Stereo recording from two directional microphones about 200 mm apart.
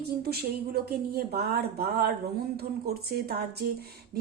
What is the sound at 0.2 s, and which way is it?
Speech, 50° right (ahead or behind).